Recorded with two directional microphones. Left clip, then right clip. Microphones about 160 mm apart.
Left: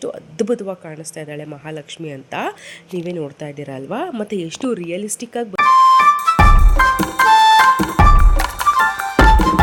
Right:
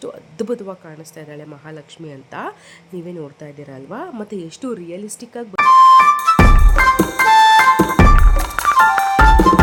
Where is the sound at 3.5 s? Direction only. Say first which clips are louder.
Left 6 dB; 10° left (ahead or behind).